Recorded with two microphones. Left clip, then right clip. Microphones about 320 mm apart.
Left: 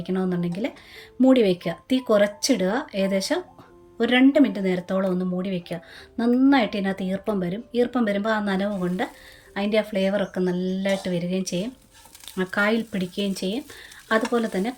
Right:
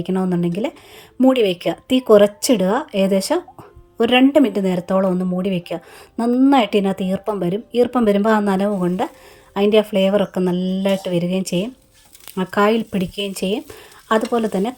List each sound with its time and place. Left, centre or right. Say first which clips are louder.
0.0 s speech: right 6 dB; centre